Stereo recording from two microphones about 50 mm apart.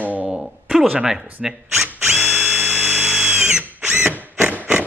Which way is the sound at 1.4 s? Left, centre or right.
Centre.